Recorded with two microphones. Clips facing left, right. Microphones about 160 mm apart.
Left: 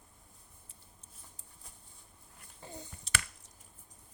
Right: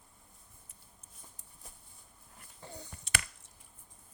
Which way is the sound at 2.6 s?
20° left (ahead or behind).